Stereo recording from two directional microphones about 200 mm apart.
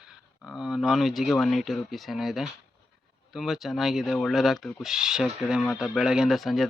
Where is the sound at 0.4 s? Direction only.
Centre (ahead or behind).